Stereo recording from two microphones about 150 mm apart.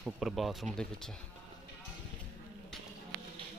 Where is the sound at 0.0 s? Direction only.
Centre (ahead or behind).